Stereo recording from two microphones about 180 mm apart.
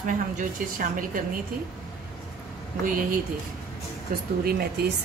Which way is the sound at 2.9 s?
50° right (ahead or behind).